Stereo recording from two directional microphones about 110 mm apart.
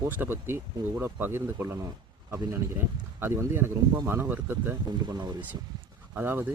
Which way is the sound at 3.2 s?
20° right (ahead or behind).